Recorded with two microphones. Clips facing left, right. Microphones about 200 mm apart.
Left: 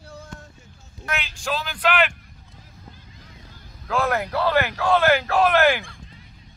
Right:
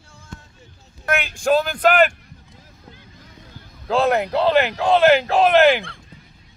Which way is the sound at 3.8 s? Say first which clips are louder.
Right 5 dB; 25° right (ahead or behind).